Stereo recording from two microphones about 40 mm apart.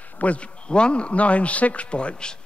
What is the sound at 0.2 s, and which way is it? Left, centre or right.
Speech, left.